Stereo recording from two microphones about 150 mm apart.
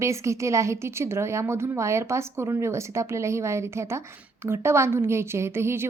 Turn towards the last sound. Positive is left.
turn(degrees=-15)  # may be behind; listen again after turning